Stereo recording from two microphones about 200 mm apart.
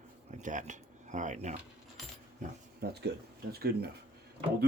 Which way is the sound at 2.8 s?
50° right (ahead or behind).